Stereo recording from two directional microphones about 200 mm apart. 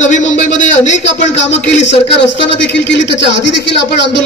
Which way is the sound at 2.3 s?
65° left (ahead or behind).